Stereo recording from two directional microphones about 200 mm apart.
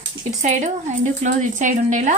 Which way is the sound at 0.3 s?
35° right (ahead or behind).